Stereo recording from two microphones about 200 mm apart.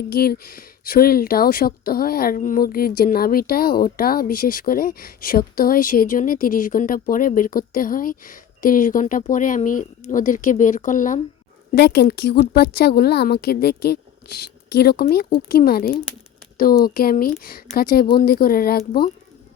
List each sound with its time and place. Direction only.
0.1 s speech: 50° left (ahead or behind)
11.7 s speech: 55° left (ahead or behind)